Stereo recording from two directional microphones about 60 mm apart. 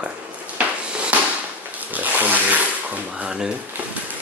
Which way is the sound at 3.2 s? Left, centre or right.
Centre.